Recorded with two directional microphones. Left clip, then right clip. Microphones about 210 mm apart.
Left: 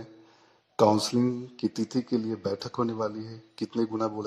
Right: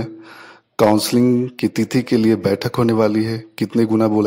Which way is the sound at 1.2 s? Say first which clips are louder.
Right 12 dB; 30° right (ahead or behind).